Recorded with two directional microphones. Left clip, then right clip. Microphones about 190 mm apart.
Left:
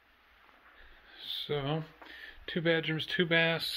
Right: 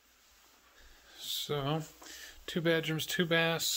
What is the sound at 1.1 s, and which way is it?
Speech, 15° right (ahead or behind).